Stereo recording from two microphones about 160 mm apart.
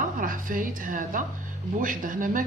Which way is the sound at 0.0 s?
55° right (ahead or behind).